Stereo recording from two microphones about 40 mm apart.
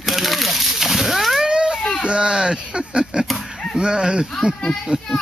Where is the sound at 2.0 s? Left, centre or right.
Right.